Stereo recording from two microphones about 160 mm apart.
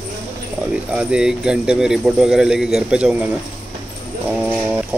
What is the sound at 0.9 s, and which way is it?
Speech, 5° right (ahead or behind).